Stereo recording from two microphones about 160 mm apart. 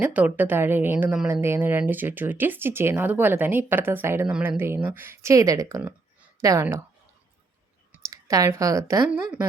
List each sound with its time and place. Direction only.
0.0 s a woman's voice: 10° right (ahead or behind)
8.1 s speech: 20° right (ahead or behind)
9.0 s a woman's voice: 5° right (ahead or behind)